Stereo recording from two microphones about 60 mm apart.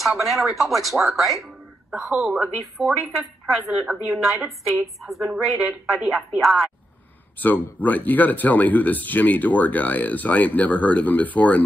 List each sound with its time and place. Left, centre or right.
0.0 s speech: centre
7.3 s speech: left